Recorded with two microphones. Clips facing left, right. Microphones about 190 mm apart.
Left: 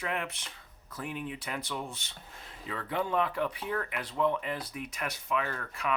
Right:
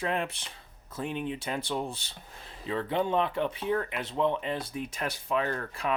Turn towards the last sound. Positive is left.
turn(degrees=-30)  # may be behind; listen again after turning